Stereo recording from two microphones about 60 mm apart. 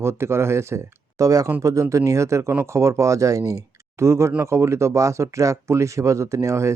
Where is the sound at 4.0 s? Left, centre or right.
Right.